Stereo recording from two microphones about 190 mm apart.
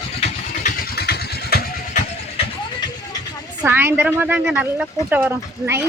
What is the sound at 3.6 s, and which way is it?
Speech, 10° right (ahead or behind).